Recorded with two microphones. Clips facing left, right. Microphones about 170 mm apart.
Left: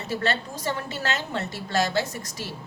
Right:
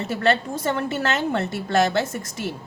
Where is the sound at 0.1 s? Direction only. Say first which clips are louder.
Right 5 dB; 55° right (ahead or behind).